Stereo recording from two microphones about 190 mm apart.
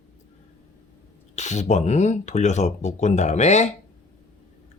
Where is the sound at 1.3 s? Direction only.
35° left (ahead or behind).